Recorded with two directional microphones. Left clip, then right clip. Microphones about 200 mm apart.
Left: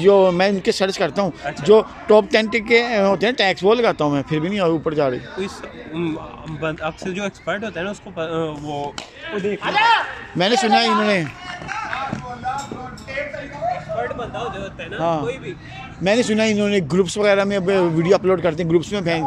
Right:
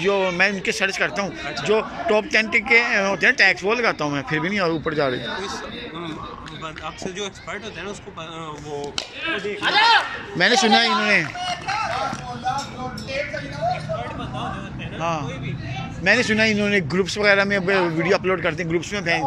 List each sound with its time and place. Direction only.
0.0 s a man's voice: 20° left (ahead or behind)
6.6 s speech: 45° left (ahead or behind)
9.6 s speech: 5° left (ahead or behind)
15.0 s a man's voice: 20° left (ahead or behind)